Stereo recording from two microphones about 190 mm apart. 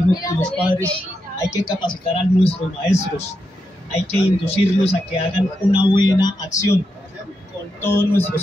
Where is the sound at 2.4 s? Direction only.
35° left (ahead or behind).